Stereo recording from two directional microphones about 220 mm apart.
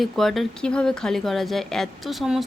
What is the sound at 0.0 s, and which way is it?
Speech, centre (ahead or behind).